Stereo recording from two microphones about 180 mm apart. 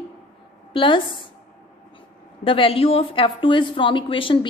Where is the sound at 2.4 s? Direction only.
30° left (ahead or behind).